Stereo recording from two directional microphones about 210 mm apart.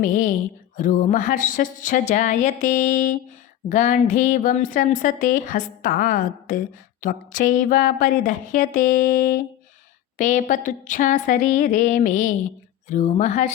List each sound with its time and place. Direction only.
0.0 s a woman's voice: 40° left (ahead or behind)